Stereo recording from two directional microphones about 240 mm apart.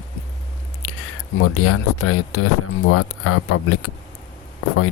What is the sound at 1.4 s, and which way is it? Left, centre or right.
Speech, left.